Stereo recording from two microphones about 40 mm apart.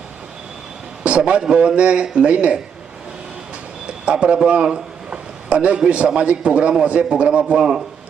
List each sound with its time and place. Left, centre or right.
1.0 s a man's voice: right
3.8 s a man's voice: right